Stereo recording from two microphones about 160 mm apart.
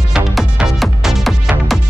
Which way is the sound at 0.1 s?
Centre (ahead or behind).